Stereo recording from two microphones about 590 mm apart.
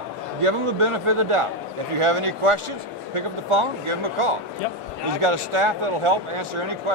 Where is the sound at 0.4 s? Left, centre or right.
Right.